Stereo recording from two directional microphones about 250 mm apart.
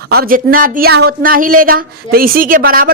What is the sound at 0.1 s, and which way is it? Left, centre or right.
Speech, right.